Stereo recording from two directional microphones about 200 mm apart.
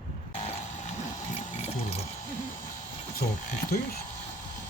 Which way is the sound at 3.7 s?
50° left (ahead or behind).